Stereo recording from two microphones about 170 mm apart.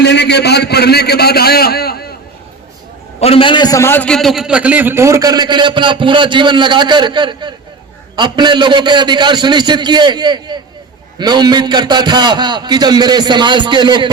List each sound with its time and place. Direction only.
0.0 s a man's voice: 75° left (ahead or behind)
3.2 s a man's voice: 35° left (ahead or behind); by 14.1 s 25° right (ahead or behind)